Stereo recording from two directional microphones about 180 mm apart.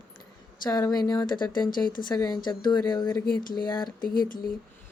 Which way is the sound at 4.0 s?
55° left (ahead or behind).